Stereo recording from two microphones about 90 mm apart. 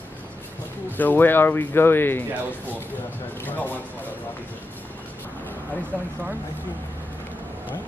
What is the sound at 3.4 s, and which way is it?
Speech, 20° left (ahead or behind).